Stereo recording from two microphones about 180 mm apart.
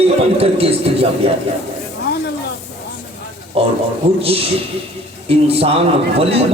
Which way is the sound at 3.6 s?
35° right (ahead or behind).